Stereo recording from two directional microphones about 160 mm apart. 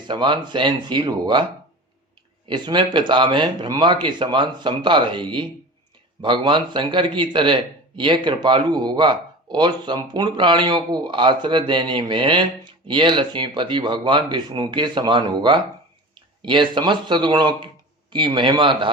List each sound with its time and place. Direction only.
0.1 s a man's voice: 30° right (ahead or behind)
2.5 s a man's voice: 30° right (ahead or behind)